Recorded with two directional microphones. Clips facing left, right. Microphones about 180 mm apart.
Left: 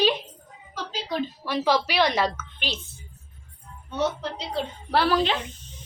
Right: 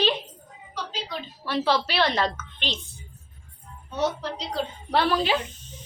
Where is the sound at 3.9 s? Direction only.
25° left (ahead or behind).